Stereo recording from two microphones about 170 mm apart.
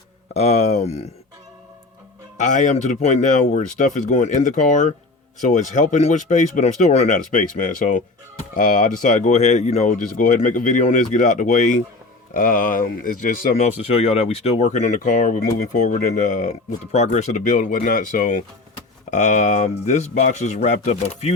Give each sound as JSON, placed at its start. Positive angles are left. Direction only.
{"t": 0.3, "sound": "speech", "side_deg": 40}
{"t": 2.4, "sound": "speech", "side_deg": 45}
{"t": 13.6, "sound": "speech", "side_deg": 40}